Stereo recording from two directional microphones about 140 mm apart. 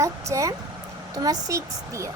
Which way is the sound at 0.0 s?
20° right (ahead or behind).